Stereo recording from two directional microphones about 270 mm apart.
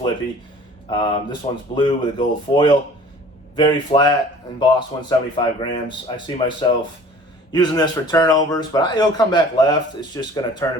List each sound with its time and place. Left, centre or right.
0.9 s speech: centre